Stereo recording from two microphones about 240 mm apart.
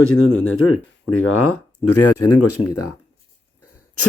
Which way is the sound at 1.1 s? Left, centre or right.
Left.